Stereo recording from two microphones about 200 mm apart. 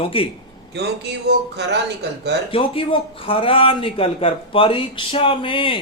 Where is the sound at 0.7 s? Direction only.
55° right (ahead or behind).